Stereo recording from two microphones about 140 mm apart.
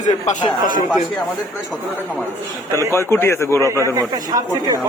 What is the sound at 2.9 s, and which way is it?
Speech, 20° left (ahead or behind).